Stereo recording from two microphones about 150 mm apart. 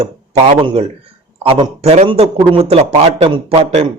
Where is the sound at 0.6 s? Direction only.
40° right (ahead or behind).